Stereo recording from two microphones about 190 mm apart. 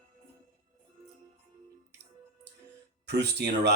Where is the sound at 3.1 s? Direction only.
60° right (ahead or behind).